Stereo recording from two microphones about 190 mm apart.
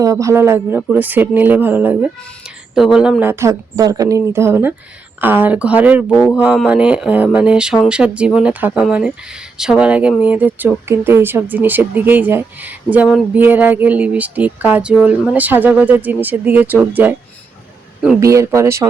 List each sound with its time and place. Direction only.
0.0 s speech: 15° right (ahead or behind)
18.2 s speech: 15° right (ahead or behind)